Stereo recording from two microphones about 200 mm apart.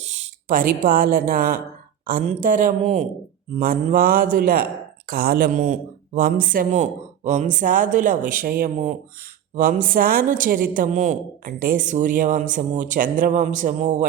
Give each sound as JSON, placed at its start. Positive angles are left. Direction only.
{"t": 0.0, "sound": "a woman's voice", "side_deg": -35}
{"t": 3.6, "sound": "a woman's voice", "side_deg": -45}